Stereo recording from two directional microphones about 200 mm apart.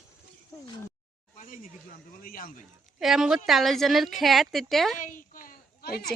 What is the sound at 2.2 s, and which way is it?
Speech, 45° left (ahead or behind).